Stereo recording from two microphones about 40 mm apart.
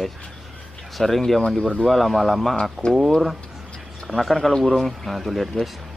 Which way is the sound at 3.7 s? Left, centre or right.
Centre.